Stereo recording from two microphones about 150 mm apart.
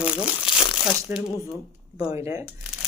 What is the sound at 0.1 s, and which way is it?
Speech, 35° left (ahead or behind).